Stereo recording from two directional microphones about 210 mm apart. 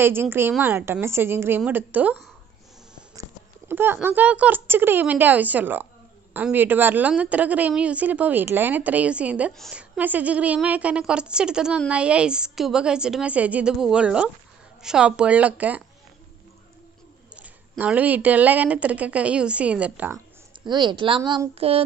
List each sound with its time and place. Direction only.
0.0 s speech: 10° right (ahead or behind)
3.2 s a woman's voice: 10° right (ahead or behind)
17.4 s speech: 5° right (ahead or behind)
20.6 s speech: 20° right (ahead or behind)